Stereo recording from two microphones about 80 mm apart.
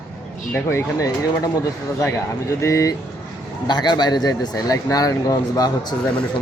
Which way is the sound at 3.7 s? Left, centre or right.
Left.